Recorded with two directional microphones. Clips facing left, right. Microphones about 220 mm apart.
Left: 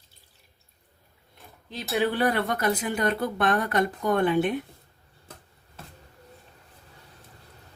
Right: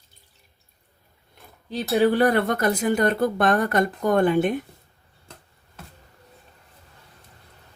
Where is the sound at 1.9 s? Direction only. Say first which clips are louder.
Right 6 dB; 40° right (ahead or behind).